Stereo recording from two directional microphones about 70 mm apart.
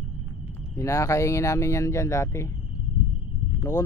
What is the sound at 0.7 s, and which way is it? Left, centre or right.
Speech, left.